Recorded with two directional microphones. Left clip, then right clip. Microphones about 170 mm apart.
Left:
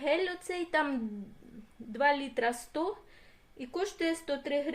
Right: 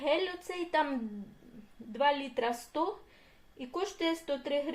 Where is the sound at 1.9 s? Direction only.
20° left (ahead or behind).